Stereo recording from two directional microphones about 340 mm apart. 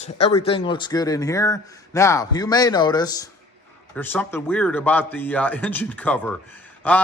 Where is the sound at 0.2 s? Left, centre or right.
Centre.